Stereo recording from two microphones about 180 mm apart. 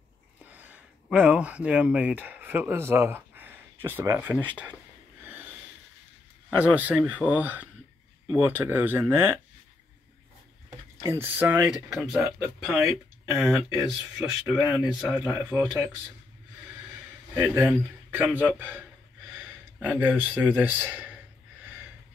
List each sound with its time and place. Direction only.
0.5 s speech: 10° right (ahead or behind)
6.6 s speech: 10° right (ahead or behind)
11.1 s speech: 10° right (ahead or behind)
18.1 s a man's voice: 10° right (ahead or behind)